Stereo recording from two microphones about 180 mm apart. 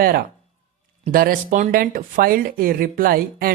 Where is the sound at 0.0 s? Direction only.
55° right (ahead or behind).